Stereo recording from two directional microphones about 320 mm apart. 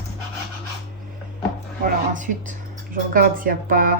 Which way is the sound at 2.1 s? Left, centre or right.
Right.